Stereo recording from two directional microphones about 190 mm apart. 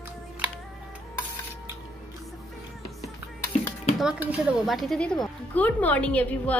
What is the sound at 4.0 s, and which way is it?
A woman's voice, 5° right (ahead or behind).